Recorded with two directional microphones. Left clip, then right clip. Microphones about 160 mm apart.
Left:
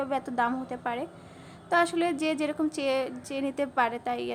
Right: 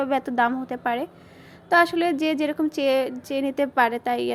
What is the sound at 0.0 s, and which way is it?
A woman's voice, 20° right (ahead or behind).